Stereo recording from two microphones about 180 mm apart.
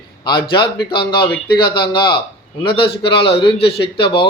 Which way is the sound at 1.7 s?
25° left (ahead or behind).